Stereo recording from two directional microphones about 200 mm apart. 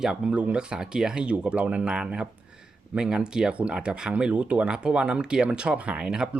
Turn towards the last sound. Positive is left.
turn(degrees=-5)  # may be behind; listen again after turning